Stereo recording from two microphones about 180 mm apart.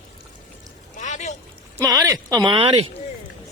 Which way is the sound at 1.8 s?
20° right (ahead or behind).